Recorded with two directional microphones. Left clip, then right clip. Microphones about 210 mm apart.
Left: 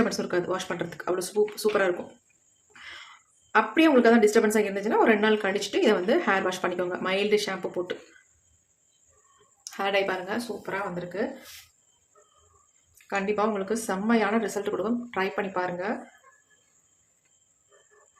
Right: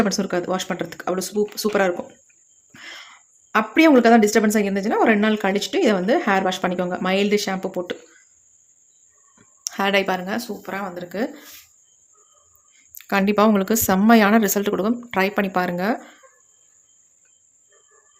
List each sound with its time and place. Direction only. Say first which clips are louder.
0.0 s speech: right 4 dB; 40° right (ahead or behind)
9.6 s speech: right 6 dB; 45° right (ahead or behind)
13.1 s speech: right 8 dB; 55° right (ahead or behind)